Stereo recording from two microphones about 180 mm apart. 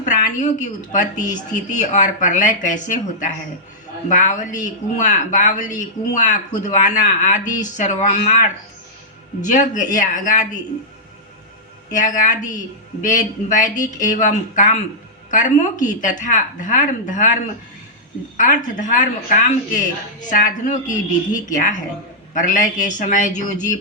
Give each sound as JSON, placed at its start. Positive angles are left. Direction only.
{"t": 0.0, "sound": "speech", "side_deg": 40}
{"t": 11.9, "sound": "speech", "side_deg": 45}
{"t": 18.3, "sound": "speech", "side_deg": 45}
{"t": 22.4, "sound": "speech", "side_deg": 45}